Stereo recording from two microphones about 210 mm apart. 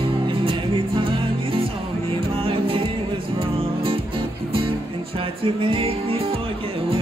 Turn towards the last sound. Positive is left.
turn(degrees=-25)  # may be behind; listen again after turning